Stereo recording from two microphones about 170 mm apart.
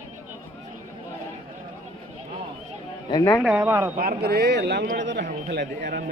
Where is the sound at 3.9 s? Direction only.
65° right (ahead or behind); by 5.2 s 90° right.